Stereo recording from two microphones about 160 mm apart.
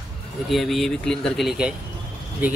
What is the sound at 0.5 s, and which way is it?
Speech, centre (ahead or behind).